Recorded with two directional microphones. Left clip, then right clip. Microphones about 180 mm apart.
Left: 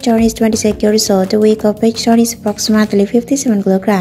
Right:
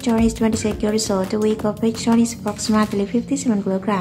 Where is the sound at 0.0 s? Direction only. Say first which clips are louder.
Left 7 dB; 15° left (ahead or behind).